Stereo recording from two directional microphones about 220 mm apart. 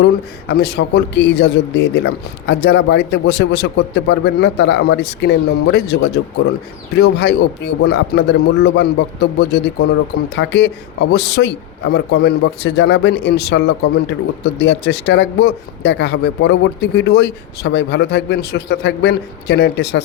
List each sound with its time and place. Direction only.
0.0 s speech: 50° left (ahead or behind)